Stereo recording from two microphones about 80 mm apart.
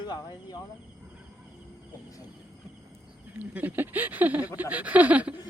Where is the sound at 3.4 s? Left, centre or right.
Right.